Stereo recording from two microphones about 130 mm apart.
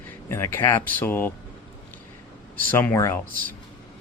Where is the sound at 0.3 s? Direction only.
20° left (ahead or behind).